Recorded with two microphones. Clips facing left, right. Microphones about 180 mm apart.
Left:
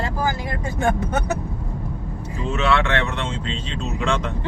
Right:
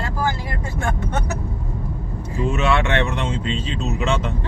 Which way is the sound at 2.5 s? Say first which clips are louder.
Even; 15° right (ahead or behind).